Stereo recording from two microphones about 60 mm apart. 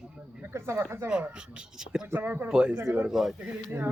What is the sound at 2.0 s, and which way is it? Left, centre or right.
Speech, right.